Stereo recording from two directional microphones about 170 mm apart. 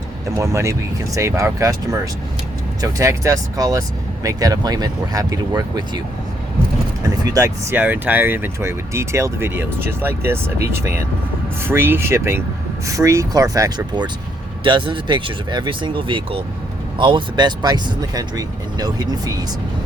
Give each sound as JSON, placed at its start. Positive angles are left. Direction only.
{"t": 0.3, "sound": "speech", "side_deg": -15}
{"t": 7.0, "sound": "speech", "side_deg": -20}